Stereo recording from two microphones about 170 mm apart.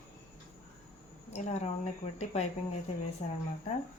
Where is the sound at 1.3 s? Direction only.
40° left (ahead or behind).